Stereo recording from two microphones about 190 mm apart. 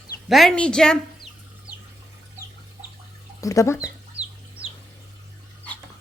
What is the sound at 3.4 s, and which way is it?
Speech, 15° left (ahead or behind).